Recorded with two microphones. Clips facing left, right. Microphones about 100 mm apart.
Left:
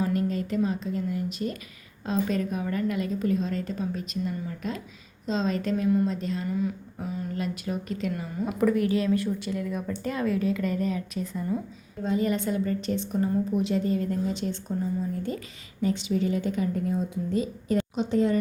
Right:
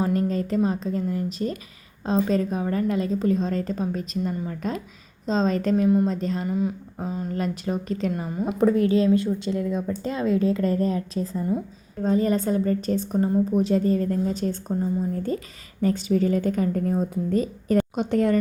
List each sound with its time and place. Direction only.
0.0 s a woman's voice: 35° right (ahead or behind)
5.8 s a woman's voice: 25° right (ahead or behind)
6.1 s a woman's voice: 40° right (ahead or behind)
6.4 s a woman's voice: 25° right (ahead or behind)
7.3 s a woman's voice: 40° right (ahead or behind); by 18.3 s 55° right (ahead or behind)